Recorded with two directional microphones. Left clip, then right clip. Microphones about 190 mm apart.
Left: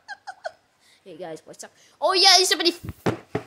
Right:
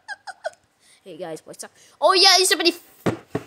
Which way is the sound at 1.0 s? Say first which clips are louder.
Right 3 dB; 15° right (ahead or behind).